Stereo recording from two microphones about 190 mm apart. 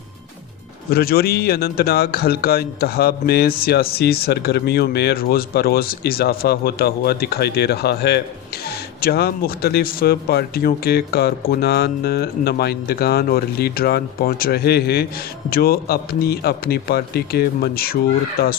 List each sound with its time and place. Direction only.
0.9 s a man's voice: 55° left (ahead or behind)